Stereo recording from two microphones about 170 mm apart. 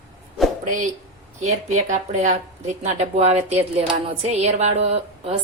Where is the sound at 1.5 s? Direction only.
40° right (ahead or behind).